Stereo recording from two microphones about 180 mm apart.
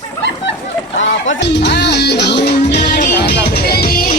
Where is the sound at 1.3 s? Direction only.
70° left (ahead or behind).